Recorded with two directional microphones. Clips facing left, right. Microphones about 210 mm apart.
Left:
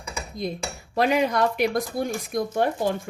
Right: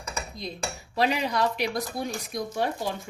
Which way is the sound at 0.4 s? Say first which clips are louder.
Left 4 dB; 50° left (ahead or behind).